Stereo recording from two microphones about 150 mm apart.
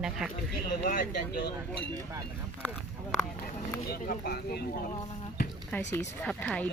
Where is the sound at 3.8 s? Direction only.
85° left.